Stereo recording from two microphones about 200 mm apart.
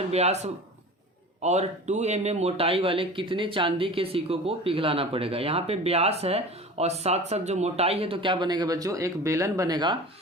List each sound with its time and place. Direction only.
0.1 s speech: 35° right (ahead or behind)